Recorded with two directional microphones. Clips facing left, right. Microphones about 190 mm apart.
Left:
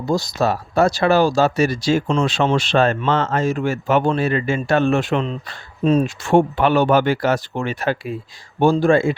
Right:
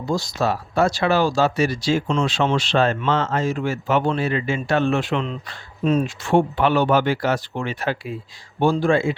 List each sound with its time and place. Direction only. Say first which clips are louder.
0.1 s speech: left 3 dB; 40° left (ahead or behind)